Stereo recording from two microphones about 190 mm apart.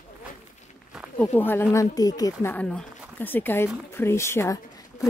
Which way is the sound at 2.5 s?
5° left (ahead or behind).